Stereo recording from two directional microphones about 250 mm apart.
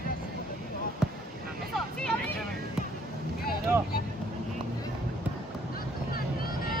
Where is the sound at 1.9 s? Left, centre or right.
Centre.